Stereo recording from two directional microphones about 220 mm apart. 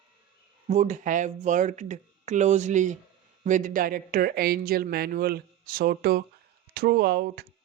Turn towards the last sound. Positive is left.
turn(degrees=-45)  # may be behind; listen again after turning